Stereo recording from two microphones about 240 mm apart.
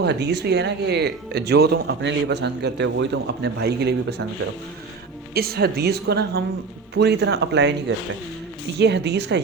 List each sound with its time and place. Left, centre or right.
0.0 s speech: right
5.3 s a woman's voice: right